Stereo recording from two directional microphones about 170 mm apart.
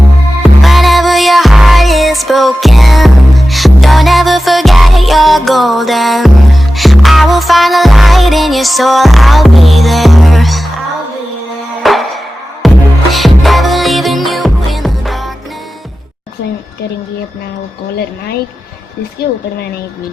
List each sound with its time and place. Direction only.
0.6 s music: centre (ahead or behind)
11.8 s music: centre (ahead or behind)